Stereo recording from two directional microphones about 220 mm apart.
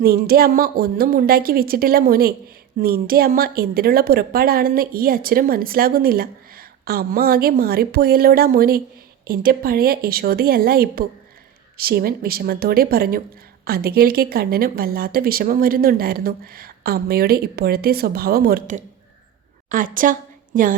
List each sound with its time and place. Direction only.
0.0 s a woman's voice: 45° right (ahead or behind)